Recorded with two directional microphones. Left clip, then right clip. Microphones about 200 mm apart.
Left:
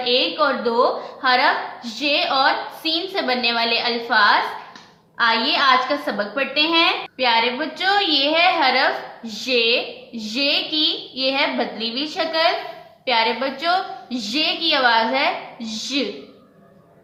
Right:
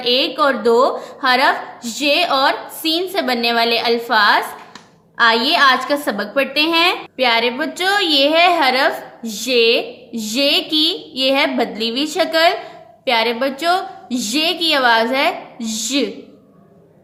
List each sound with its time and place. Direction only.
0.0 s a woman's voice: 50° right (ahead or behind)